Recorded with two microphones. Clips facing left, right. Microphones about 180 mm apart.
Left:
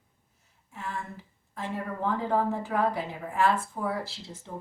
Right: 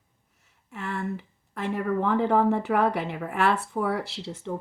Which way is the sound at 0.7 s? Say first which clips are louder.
Right 6 dB; 70° right (ahead or behind).